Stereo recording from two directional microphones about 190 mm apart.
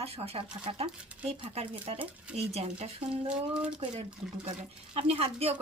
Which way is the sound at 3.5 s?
5° right (ahead or behind).